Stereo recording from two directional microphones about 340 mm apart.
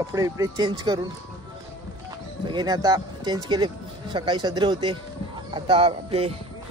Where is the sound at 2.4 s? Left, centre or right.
Centre.